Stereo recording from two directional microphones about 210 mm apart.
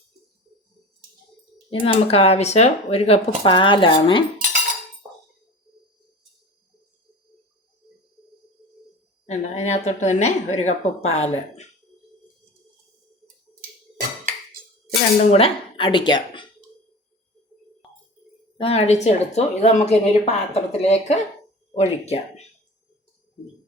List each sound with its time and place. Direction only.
1.7 s speech: 25° left (ahead or behind)
4.4 s cutlery: 40° right (ahead or behind)
9.2 s speech: 30° left (ahead or behind)
15.3 s a woman's voice: 25° left (ahead or behind)
18.5 s speech: 25° left (ahead or behind)